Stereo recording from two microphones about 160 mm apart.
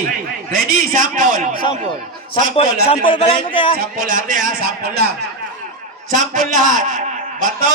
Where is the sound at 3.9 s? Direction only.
55° right (ahead or behind).